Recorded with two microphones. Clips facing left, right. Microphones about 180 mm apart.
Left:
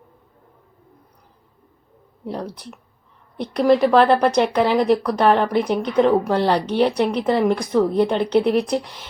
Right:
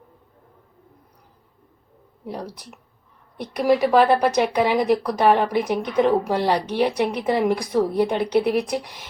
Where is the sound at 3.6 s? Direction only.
10° right (ahead or behind).